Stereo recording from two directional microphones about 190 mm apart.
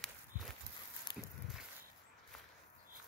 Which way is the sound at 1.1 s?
25° left (ahead or behind).